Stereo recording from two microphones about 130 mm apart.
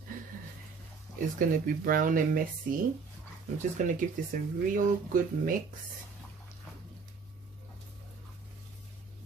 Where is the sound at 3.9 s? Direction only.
90° right.